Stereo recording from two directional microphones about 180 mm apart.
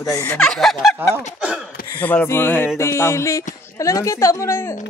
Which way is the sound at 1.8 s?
15° left (ahead or behind).